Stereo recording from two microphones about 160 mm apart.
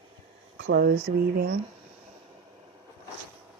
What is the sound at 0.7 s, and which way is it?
Speech, 80° right.